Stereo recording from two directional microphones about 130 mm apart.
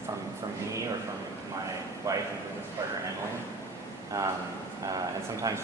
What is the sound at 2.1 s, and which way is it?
Speech, 25° right (ahead or behind).